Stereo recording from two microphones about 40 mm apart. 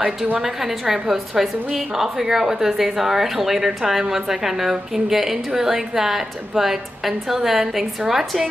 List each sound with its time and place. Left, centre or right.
0.4 s a woman's voice: centre